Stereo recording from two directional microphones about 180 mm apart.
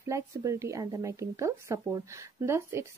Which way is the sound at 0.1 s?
15° right (ahead or behind).